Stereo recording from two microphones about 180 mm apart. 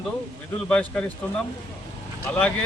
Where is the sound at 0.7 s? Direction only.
5° left (ahead or behind).